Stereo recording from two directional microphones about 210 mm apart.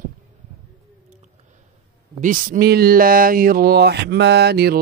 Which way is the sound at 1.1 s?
35° right (ahead or behind).